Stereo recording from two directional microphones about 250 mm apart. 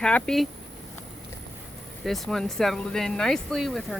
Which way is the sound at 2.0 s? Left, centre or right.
Centre.